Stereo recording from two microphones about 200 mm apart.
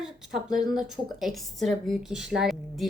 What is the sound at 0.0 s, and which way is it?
A woman's voice, centre (ahead or behind).